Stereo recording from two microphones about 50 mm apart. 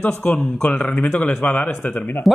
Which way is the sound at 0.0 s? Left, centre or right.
Left.